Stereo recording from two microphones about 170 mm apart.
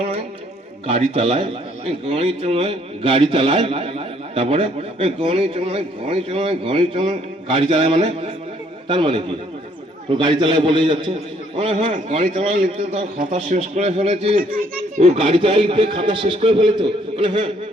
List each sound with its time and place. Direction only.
0.9 s a man's voice: 35° right (ahead or behind)
11.9 s a man's voice: 45° right (ahead or behind)
12.3 s a man's voice: 30° right (ahead or behind)
14.3 s a child's voice: 60° right (ahead or behind)
14.9 s a man's voice: 40° right (ahead or behind)